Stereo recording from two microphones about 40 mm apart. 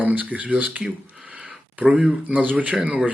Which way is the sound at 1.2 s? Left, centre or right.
Right.